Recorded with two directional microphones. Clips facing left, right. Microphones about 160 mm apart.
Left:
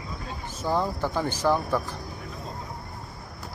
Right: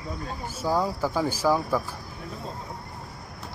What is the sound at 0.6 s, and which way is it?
Speech, 10° right (ahead or behind).